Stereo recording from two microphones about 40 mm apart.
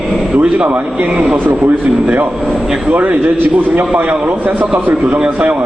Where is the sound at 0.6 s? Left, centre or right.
Right.